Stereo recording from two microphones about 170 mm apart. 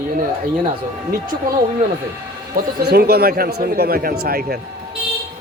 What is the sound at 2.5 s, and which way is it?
Speech, 65° right (ahead or behind).